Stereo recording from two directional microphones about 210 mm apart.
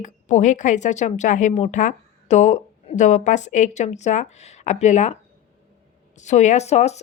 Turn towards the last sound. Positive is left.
turn(degrees=30)  # may be behind; listen again after turning